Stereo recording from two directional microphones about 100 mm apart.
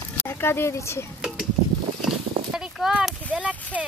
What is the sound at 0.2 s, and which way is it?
Speech, 25° left (ahead or behind).